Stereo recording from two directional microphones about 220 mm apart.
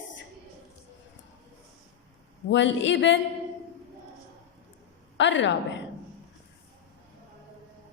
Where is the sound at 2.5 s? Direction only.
55° left (ahead or behind).